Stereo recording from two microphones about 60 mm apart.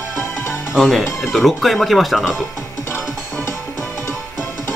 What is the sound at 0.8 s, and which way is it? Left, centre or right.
Speech, centre.